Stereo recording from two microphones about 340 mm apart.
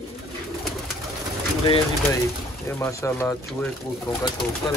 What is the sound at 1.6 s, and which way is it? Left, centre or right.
Speech, centre.